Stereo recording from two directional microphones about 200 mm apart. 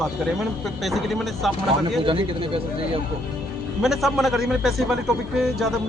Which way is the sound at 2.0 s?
25° right (ahead or behind).